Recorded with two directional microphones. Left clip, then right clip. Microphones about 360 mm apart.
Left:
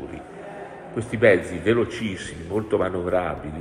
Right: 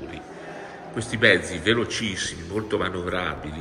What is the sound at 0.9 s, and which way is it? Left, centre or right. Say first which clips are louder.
A man's voice: left 1 dB; centre.